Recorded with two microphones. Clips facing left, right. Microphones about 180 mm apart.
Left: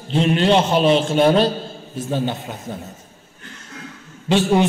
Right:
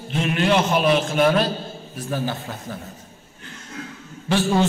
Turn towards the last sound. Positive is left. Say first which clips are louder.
# left 3 dB
turn(degrees=20)  # may be behind; listen again after turning